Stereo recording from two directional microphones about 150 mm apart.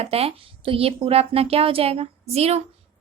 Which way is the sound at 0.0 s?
40° right (ahead or behind).